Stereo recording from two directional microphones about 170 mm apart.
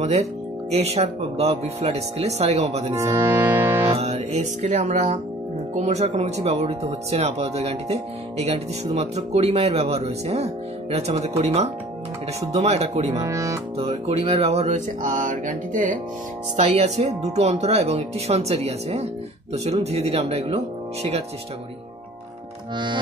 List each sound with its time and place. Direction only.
0.0 s speech: 40° right (ahead or behind)
3.0 s music: 20° right (ahead or behind)
4.0 s speech: 40° right (ahead or behind)
13.2 s speech: 20° right (ahead or behind)
13.7 s speech: 35° right (ahead or behind)